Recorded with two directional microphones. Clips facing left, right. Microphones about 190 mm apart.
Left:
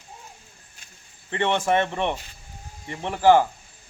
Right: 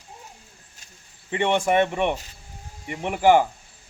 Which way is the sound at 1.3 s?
15° right (ahead or behind).